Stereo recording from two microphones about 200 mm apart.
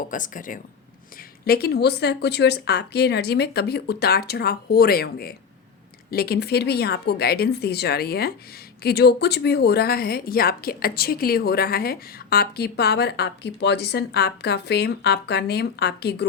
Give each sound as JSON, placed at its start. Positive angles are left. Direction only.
{"t": 0.1, "sound": "speech", "side_deg": 40}